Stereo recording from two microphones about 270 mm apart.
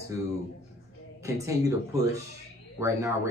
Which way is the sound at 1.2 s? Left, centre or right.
Centre.